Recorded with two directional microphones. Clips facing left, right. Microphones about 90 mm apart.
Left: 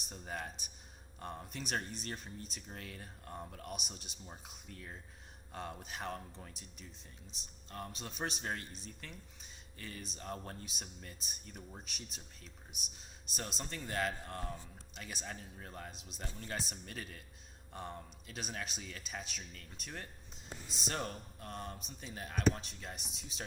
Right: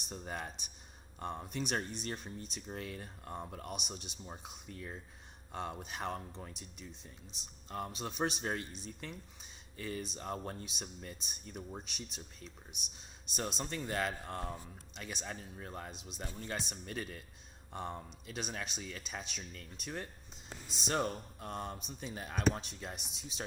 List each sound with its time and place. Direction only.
0.0 s speech: centre (ahead or behind)